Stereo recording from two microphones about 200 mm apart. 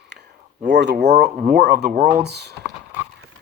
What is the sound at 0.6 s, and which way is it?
Speech, 60° right (ahead or behind).